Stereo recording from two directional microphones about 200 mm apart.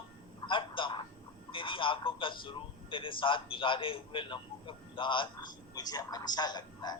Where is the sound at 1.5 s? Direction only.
25° left (ahead or behind).